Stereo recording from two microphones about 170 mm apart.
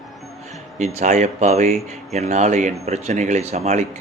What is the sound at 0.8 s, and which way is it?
Speech, 45° right (ahead or behind).